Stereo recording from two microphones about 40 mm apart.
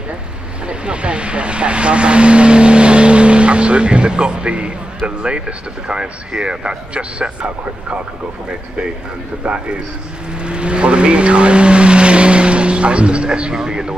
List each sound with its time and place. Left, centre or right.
0.7 s speech: right
9.4 s speech: right
10.4 s vehicle: right